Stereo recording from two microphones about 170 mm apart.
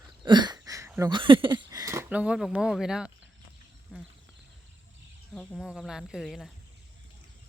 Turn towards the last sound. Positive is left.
turn(degrees=0)  # may be behind; listen again after turning